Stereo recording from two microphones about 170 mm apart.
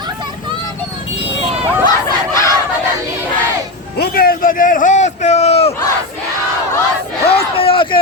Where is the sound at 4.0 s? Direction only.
60° left (ahead or behind); by 5.7 s 35° left (ahead or behind).